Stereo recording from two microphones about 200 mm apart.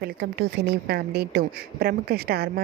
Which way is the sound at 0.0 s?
55° right (ahead or behind).